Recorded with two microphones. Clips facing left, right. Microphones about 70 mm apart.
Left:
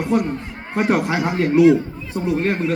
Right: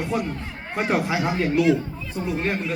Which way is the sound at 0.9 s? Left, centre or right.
Left.